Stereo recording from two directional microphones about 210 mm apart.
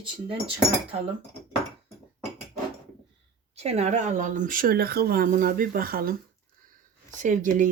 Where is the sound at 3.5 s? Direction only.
30° right (ahead or behind).